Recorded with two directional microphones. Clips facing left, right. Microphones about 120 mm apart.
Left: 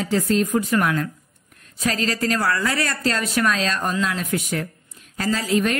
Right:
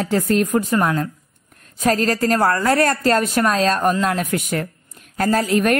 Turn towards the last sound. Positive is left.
turn(degrees=-55)  # may be behind; listen again after turning